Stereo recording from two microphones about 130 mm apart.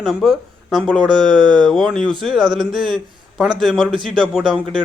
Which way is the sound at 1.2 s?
35° right (ahead or behind).